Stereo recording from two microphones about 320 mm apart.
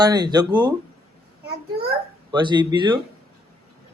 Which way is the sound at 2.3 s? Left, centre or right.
Centre.